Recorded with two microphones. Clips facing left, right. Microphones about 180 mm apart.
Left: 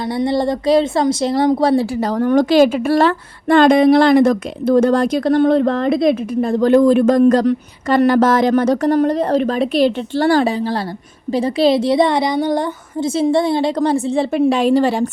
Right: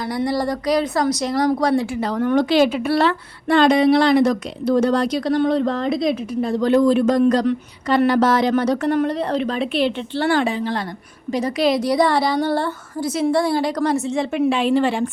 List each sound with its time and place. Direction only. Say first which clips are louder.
0.1 s a woman's voice: left 4 dB; 25° left (ahead or behind)